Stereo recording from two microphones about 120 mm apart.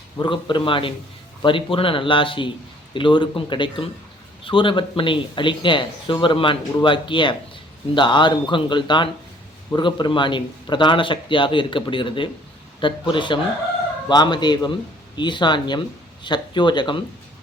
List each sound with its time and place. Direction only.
0.2 s speech: 40° left (ahead or behind)